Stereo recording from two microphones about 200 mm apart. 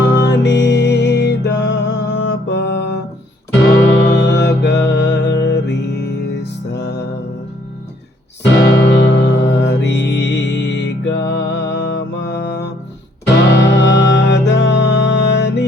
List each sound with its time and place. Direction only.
0.0 s music: 60° left (ahead or behind)
3.9 s music: 60° left (ahead or behind)
8.7 s music: 65° left (ahead or behind)